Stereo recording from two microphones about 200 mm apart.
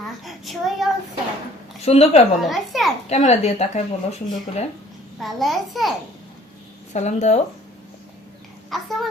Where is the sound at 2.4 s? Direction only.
Centre (ahead or behind).